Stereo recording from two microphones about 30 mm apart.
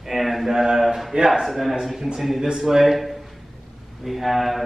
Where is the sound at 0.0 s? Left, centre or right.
Centre.